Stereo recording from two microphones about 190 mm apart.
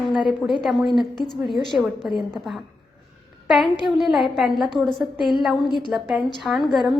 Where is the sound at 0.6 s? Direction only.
Centre (ahead or behind).